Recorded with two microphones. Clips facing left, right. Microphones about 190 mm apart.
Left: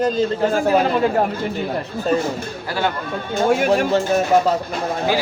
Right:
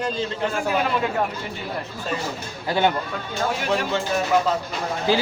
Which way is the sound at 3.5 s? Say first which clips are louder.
Left 8 dB; 50° left (ahead or behind).